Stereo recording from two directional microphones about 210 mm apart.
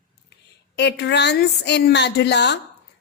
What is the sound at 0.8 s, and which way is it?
A woman's voice, 55° left (ahead or behind).